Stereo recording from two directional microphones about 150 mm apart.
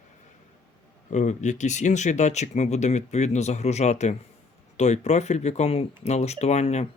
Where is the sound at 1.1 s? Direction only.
50° left (ahead or behind).